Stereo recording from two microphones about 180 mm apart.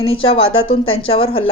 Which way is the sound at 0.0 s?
30° left (ahead or behind).